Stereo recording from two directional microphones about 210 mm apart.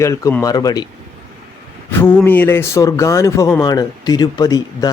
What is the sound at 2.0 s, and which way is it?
Speech, 10° left (ahead or behind).